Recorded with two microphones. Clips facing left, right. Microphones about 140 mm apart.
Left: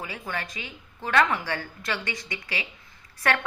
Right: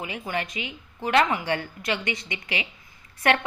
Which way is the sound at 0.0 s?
20° right (ahead or behind).